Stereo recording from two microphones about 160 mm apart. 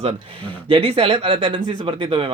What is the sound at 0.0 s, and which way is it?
Speech, 40° right (ahead or behind).